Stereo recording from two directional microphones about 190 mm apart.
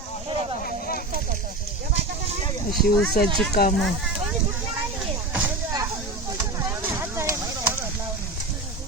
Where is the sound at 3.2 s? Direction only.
50° left (ahead or behind).